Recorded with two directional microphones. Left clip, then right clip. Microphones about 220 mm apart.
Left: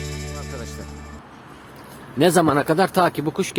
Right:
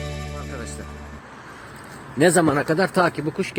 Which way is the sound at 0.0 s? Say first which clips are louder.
Even; centre (ahead or behind).